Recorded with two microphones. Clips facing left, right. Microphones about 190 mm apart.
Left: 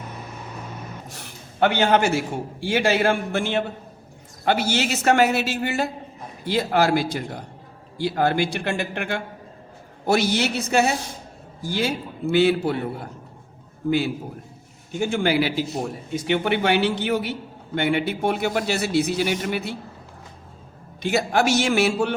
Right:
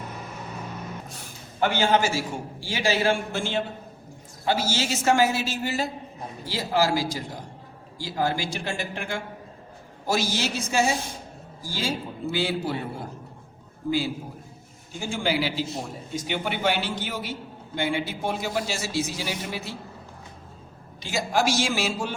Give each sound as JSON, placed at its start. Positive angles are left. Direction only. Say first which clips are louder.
{"t": 1.1, "sound": "a man's voice", "louder": "left 1 dB", "side_deg": 65}
{"t": 14.9, "sound": "a man's voice", "louder": "left 6 dB", "side_deg": 60}
{"t": 21.0, "sound": "a man's voice", "louder": "left 4 dB", "side_deg": 60}